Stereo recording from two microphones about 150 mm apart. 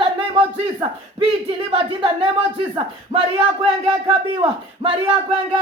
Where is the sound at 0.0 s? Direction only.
35° right (ahead or behind).